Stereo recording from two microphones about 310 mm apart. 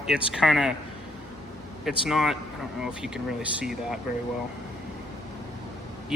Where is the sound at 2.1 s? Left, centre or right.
Centre.